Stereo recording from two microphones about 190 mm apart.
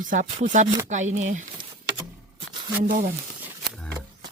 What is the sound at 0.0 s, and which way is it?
Chopping, 45° right (ahead or behind).